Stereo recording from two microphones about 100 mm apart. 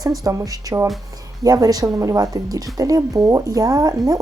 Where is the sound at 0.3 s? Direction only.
35° right (ahead or behind).